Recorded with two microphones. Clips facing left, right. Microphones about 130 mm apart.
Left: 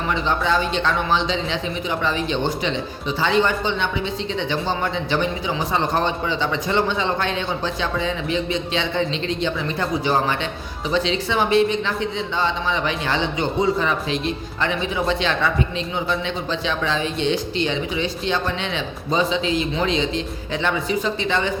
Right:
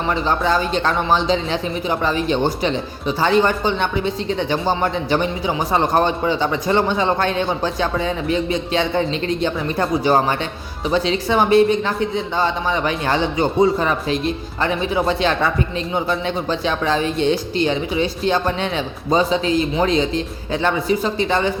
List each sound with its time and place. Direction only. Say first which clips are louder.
0.1 s a man's voice: right 2 dB; 40° right (ahead or behind)